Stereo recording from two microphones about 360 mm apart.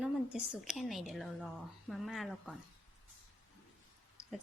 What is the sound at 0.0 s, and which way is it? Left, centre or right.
A woman's voice, centre.